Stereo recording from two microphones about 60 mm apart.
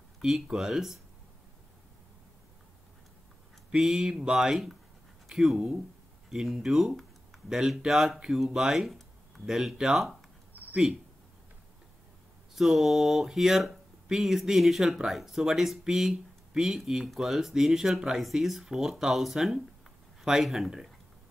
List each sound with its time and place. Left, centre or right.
0.2 s speech: centre
3.7 s speech: centre
12.5 s speech: centre